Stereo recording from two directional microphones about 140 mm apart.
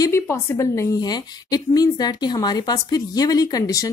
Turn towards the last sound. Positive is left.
turn(degrees=25)  # may be behind; listen again after turning